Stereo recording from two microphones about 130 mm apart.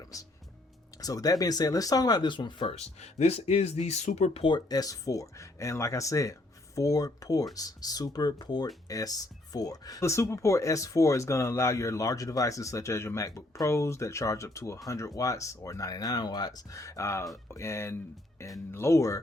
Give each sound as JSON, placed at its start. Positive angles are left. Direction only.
{"t": 1.0, "sound": "speech", "side_deg": 30}
{"t": 3.0, "sound": "speech", "side_deg": 55}
{"t": 4.4, "sound": "speech", "side_deg": 35}